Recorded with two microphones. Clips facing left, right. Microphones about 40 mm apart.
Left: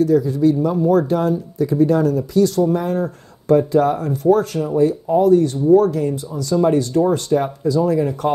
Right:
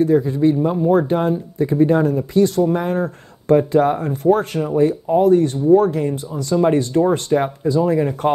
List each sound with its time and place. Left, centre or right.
0.0 s speech: right